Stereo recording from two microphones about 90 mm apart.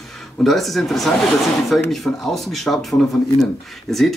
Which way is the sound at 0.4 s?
Centre (ahead or behind).